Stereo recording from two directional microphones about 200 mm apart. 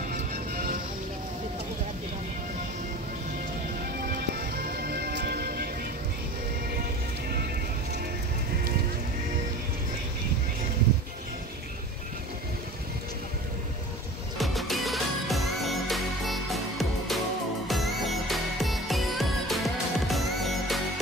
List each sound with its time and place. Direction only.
0.1 s music: 45° right (ahead or behind)
4.0 s music: 50° right (ahead or behind)
14.4 s music: centre (ahead or behind)